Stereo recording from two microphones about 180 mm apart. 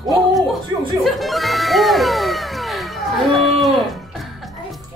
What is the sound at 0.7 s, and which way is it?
Chuckle, 25° right (ahead or behind).